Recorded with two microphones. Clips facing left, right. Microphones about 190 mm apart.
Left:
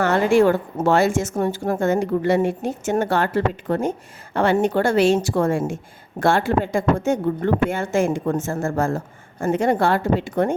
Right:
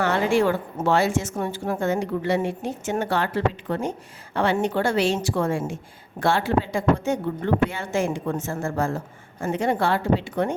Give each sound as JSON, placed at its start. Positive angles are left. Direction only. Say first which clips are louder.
{"t": 0.0, "sound": "a woman's voice", "louder": "left 4 dB", "side_deg": 45}